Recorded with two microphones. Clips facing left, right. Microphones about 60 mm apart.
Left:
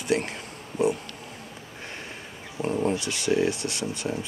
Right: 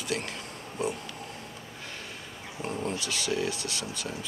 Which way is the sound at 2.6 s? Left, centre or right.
Left.